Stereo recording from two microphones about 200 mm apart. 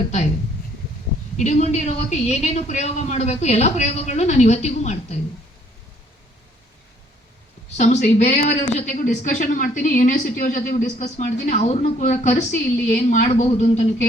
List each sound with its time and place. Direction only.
1.4 s speech: 35° left (ahead or behind)
7.8 s speech: 35° left (ahead or behind)